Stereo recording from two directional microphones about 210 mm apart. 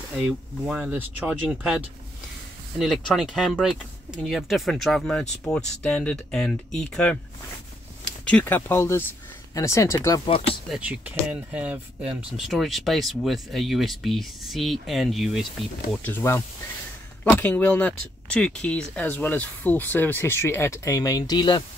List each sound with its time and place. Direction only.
0.2 s speech: centre (ahead or behind)
8.3 s speech: 10° left (ahead or behind); by 10.6 s 25° left (ahead or behind)
10.7 s speech: 5° right (ahead or behind)
16.0 s speech: 10° left (ahead or behind)